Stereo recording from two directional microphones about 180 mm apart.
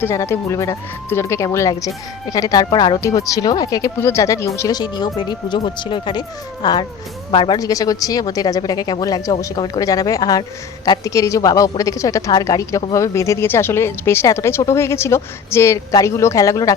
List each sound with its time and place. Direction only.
0.0 s speech: 15° left (ahead or behind)